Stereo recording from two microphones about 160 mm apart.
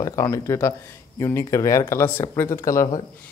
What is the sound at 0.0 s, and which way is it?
Speech, 20° left (ahead or behind).